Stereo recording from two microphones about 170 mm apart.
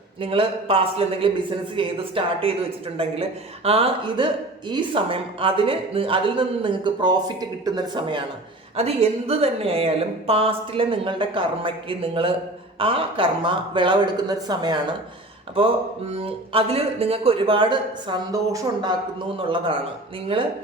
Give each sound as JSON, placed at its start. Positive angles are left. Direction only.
{"t": 0.2, "sound": "speech", "side_deg": -35}
{"t": 8.7, "sound": "speech", "side_deg": -40}